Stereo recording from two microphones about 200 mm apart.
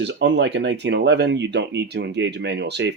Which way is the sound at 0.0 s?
60° right (ahead or behind).